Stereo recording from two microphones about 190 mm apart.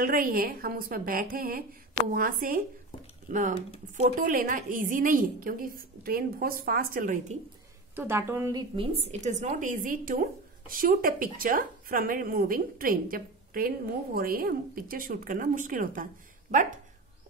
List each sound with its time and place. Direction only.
0.0 s speech: 45° right (ahead or behind)
7.9 s a woman's voice: 10° right (ahead or behind)
8.9 s speech: 35° right (ahead or behind)